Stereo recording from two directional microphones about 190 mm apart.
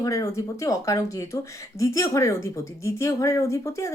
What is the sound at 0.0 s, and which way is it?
Speech, 15° left (ahead or behind).